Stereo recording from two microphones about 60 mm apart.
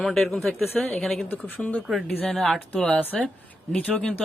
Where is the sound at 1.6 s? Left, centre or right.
Left.